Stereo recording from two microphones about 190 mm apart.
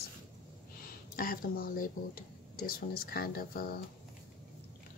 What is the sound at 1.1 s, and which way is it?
Speech, 50° left (ahead or behind).